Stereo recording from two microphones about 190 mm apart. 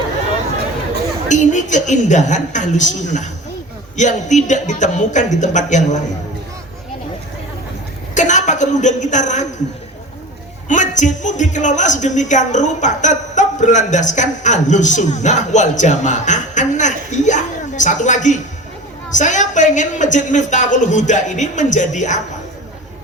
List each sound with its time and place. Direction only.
1.3 s speech: 40° left (ahead or behind)
8.1 s speech: 40° left (ahead or behind)
10.7 s speech: 40° left (ahead or behind)